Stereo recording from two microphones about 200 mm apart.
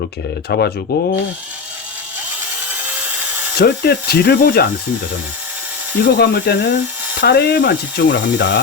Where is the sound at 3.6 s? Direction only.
55° left (ahead or behind).